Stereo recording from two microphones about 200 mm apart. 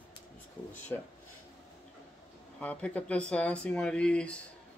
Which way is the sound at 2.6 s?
5° left (ahead or behind).